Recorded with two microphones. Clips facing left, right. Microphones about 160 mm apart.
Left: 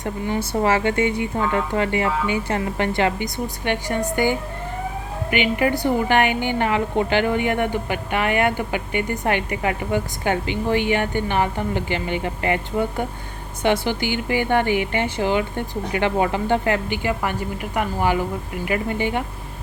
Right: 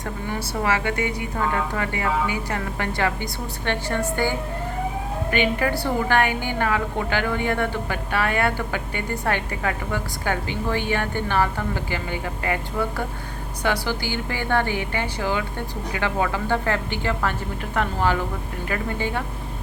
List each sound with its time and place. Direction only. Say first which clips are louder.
0.6 s a woman's voice: left 4 dB; 30° left (ahead or behind)